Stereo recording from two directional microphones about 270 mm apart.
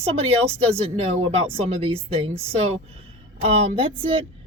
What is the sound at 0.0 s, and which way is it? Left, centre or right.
Speech, right.